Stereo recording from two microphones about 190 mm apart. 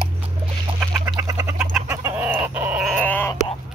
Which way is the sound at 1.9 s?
10° right (ahead or behind).